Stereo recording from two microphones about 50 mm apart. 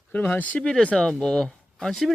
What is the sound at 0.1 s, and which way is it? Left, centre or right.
Speech, left.